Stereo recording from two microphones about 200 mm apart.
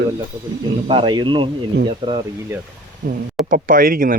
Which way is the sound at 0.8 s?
25° right (ahead or behind).